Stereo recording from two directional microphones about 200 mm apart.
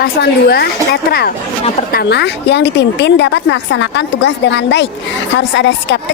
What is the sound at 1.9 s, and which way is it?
A woman's voice, 50° left (ahead or behind).